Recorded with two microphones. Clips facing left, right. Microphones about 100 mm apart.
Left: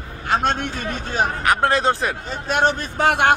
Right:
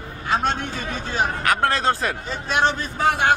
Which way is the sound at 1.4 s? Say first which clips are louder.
Left 3 dB; 25° left (ahead or behind).